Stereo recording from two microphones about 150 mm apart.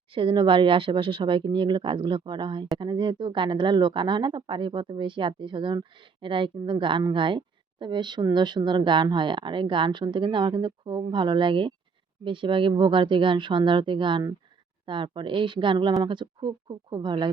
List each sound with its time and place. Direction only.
0.1 s speech: 35° right (ahead or behind)